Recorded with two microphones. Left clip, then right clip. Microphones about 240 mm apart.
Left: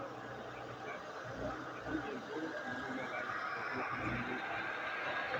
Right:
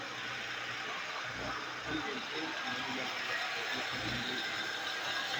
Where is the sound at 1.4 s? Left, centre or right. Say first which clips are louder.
Right 4 dB; right.